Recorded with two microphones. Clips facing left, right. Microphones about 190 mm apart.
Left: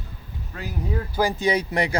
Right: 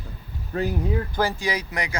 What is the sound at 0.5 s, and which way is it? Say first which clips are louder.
Speech: right 11 dB; 35° right (ahead or behind).